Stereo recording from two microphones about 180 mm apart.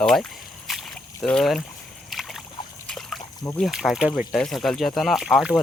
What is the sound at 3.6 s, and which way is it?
Speech, centre (ahead or behind).